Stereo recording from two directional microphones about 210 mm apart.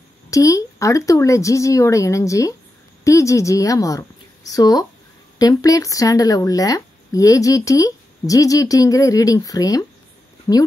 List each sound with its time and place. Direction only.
0.3 s speech: 15° left (ahead or behind)